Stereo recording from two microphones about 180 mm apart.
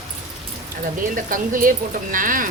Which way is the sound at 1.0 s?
50° right (ahead or behind).